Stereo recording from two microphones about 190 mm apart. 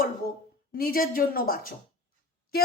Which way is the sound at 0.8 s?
50° left (ahead or behind).